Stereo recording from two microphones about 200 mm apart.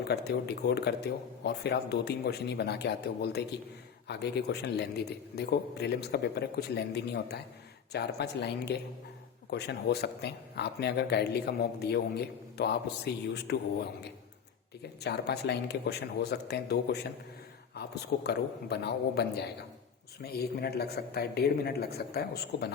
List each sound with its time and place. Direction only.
0.1 s speech: 55° left (ahead or behind)
15.0 s speech: 55° left (ahead or behind)